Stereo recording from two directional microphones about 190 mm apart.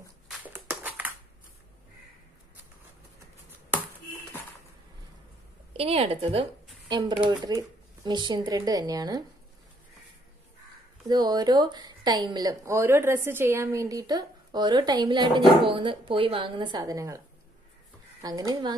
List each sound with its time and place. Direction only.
0.5 s a sound: 10° right (ahead or behind)
5.7 s a woman's voice: 30° right (ahead or behind)
11.1 s a woman's voice: 20° right (ahead or behind)
18.2 s a woman's voice: 20° right (ahead or behind)